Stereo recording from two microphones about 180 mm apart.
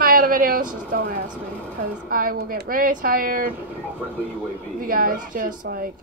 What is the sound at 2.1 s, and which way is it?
Speech, 50° right (ahead or behind).